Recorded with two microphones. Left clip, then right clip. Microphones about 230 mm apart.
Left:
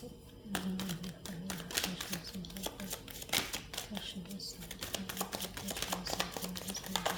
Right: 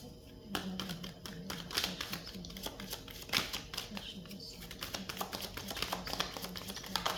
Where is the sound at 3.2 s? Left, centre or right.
Centre.